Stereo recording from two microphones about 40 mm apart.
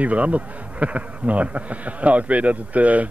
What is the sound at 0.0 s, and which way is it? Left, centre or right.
A man's voice, right.